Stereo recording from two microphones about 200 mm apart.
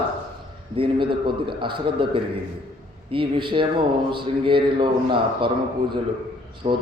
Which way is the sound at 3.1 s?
25° right (ahead or behind).